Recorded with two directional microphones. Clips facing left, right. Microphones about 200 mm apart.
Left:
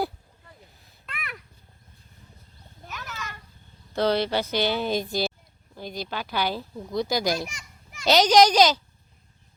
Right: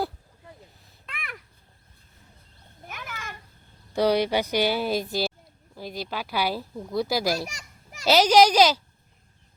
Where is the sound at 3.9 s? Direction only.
10° right (ahead or behind).